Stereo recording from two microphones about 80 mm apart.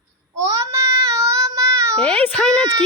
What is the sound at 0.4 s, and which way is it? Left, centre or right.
Child singing, right.